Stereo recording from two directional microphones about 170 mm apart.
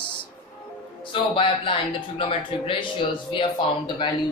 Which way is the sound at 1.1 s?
30° left (ahead or behind).